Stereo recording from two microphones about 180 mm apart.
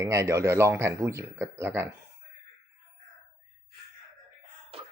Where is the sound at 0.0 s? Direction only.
15° right (ahead or behind).